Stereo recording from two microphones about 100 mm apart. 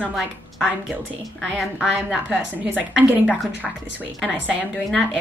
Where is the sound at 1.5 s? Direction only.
5° right (ahead or behind).